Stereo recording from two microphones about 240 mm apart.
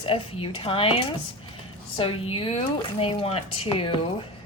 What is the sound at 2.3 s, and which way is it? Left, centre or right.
A woman's voice, left.